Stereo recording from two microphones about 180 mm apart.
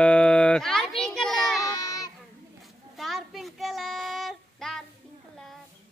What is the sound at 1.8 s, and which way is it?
Child singing, 20° left (ahead or behind).